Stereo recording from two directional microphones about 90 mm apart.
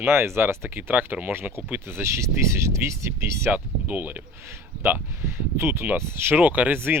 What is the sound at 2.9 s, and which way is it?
Speech, 30° right (ahead or behind).